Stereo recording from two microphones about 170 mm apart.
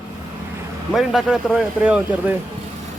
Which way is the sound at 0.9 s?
Centre (ahead or behind).